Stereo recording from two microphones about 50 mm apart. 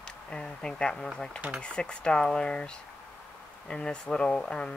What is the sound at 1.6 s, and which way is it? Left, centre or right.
Speech, centre.